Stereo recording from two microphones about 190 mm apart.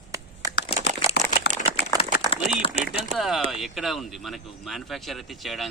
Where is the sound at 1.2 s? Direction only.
55° left (ahead or behind).